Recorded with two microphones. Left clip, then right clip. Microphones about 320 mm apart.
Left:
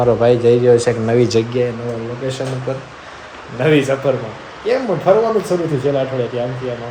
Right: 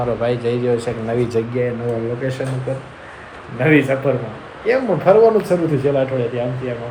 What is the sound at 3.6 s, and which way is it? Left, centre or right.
Speech, centre.